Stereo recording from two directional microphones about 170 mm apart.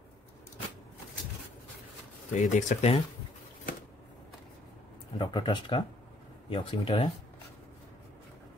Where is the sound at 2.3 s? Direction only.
45° left (ahead or behind).